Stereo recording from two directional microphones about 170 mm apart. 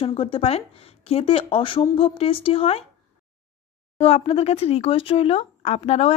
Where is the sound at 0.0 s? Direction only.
30° left (ahead or behind).